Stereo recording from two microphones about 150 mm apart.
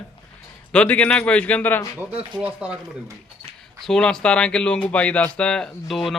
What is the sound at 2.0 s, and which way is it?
Speech, 10° right (ahead or behind).